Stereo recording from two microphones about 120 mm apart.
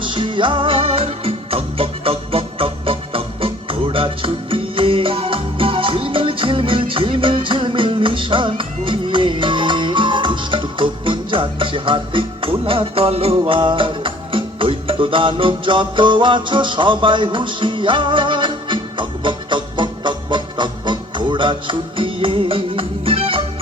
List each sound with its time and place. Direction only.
0.0 s music: 45° right (ahead or behind)